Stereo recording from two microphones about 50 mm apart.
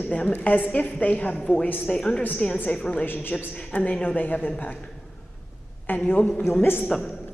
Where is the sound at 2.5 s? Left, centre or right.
Left.